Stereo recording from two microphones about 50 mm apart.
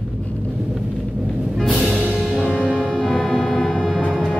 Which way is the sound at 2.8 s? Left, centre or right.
Centre.